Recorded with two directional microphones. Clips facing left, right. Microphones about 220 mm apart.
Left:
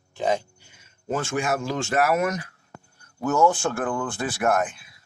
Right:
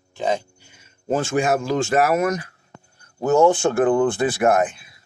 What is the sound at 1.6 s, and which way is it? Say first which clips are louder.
Speech: right 4 dB; 40° right (ahead or behind).